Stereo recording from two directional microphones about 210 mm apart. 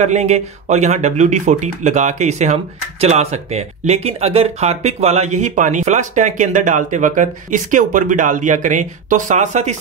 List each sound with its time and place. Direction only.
0.0 s speech: 30° right (ahead or behind)